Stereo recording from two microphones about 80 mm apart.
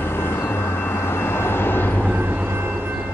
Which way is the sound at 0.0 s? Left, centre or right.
Left.